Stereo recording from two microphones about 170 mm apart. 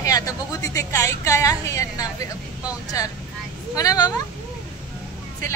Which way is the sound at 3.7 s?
20° left (ahead or behind).